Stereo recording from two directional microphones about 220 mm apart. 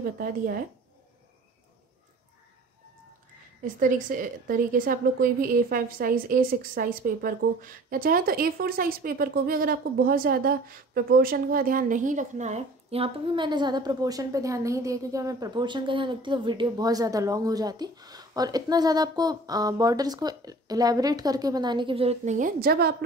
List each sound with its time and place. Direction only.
3.6 s a woman's voice: 35° right (ahead or behind)